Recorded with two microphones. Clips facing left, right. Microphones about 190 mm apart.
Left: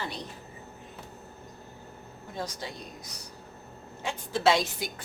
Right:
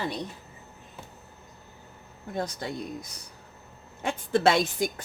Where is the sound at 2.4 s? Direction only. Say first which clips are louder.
Right 5 dB; 55° right (ahead or behind).